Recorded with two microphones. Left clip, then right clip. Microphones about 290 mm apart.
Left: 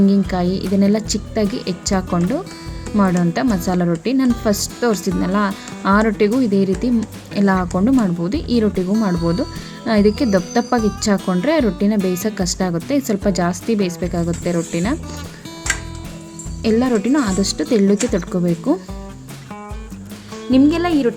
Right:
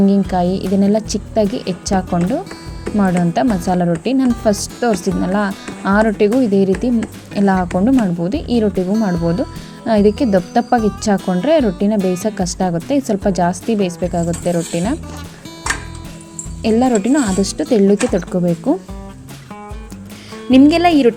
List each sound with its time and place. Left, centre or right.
0.0 s speech: centre
16.6 s speech: centre
20.5 s speech: centre